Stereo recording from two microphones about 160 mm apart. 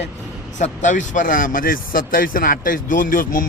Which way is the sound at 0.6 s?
50° left (ahead or behind).